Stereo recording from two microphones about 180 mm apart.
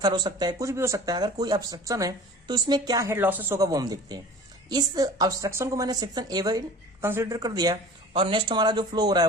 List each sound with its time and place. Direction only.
0.0 s speech: 25° right (ahead or behind)